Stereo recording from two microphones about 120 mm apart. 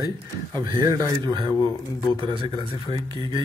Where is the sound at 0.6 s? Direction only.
30° right (ahead or behind).